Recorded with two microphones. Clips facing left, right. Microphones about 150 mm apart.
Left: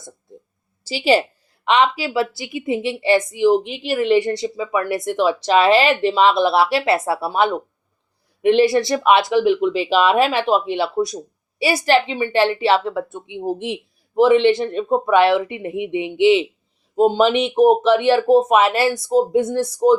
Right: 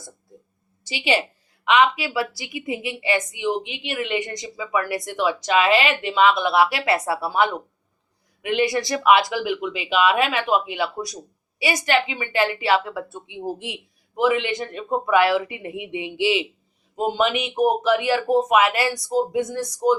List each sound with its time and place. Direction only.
0.9 s a woman's voice: 35° left (ahead or behind)
16.9 s speech: 30° left (ahead or behind)